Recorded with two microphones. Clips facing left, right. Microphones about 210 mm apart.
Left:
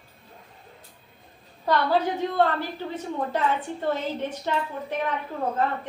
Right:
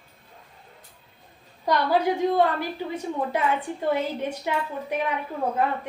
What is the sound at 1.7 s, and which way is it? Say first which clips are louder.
A woman's voice: right 1 dB; 15° right (ahead or behind).